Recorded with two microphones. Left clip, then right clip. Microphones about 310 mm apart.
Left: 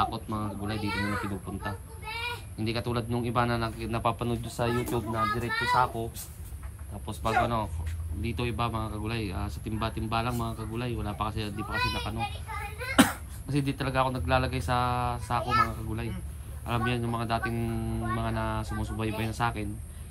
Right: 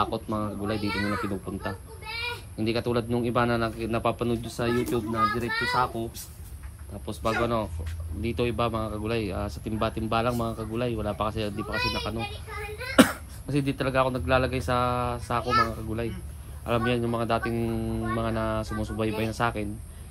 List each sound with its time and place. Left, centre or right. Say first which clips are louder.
0.0 s a man's voice: right 2 dB; centre
7.4 s a man's voice: right 3 dB; centre